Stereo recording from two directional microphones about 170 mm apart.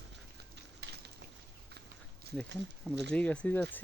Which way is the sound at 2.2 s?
70° right (ahead or behind).